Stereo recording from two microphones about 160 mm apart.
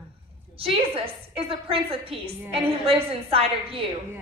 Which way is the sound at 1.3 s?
35° right (ahead or behind).